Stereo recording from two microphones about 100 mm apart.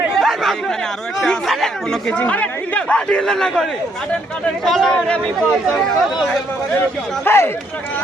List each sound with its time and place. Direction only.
0.2 s chatter: centre (ahead or behind)
1.2 s speech: centre (ahead or behind)
7.3 s speech: 25° left (ahead or behind)